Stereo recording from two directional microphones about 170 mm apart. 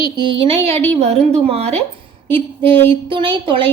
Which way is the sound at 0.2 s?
30° right (ahead or behind).